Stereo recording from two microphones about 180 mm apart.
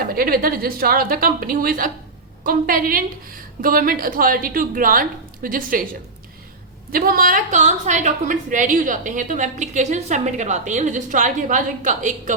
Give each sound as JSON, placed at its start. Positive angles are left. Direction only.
{"t": 0.1, "sound": "a woman's voice", "side_deg": -55}
{"t": 6.9, "sound": "a woman's voice", "side_deg": -55}